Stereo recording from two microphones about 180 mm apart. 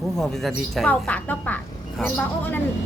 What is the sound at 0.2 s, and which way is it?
A woman's voice, centre (ahead or behind).